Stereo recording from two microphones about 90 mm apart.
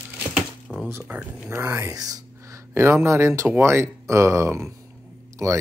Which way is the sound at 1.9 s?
45° right (ahead or behind).